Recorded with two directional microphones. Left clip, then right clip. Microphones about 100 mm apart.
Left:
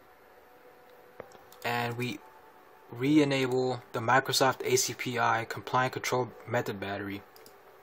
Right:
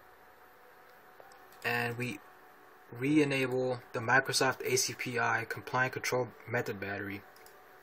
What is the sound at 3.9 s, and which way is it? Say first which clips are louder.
Speech: left 3 dB; 30° left (ahead or behind).